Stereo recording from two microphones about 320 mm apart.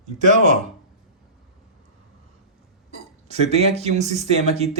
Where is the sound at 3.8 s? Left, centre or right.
Right.